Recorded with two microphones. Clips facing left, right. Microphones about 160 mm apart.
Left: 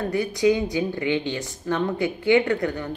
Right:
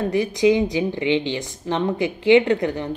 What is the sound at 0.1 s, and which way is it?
A woman's voice, 25° right (ahead or behind).